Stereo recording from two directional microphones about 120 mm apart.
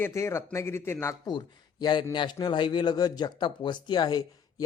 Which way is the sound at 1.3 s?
40° left (ahead or behind).